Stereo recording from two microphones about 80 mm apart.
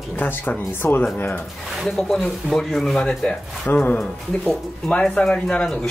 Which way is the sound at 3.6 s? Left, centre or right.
Centre.